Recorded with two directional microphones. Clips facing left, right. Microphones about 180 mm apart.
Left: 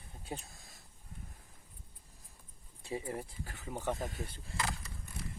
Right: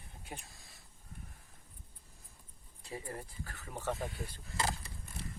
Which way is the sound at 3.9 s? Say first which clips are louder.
Even; 40° left (ahead or behind).